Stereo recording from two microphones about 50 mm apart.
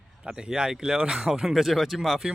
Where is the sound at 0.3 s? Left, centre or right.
Centre.